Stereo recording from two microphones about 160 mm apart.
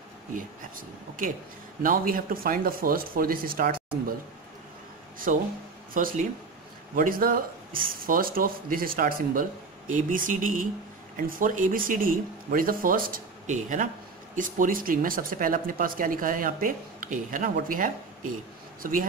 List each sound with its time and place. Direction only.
0.3 s speech: 55° right (ahead or behind)
5.3 s speech: 55° right (ahead or behind)